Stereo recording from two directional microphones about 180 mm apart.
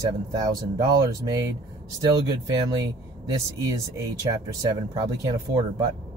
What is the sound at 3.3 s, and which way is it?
Speech, 15° right (ahead or behind).